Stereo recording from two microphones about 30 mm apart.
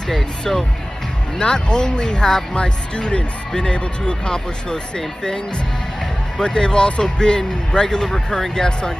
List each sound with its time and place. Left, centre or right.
0.5 s speech: centre
1.4 s speech: left
6.4 s speech: left